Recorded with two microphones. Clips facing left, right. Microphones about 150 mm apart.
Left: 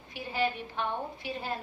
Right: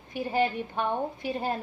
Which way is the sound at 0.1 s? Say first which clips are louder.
Right 5 dB; 50° right (ahead or behind).